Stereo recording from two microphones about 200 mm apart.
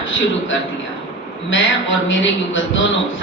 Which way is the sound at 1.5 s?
65° left (ahead or behind).